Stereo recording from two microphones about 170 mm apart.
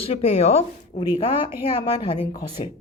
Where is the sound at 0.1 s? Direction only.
35° left (ahead or behind).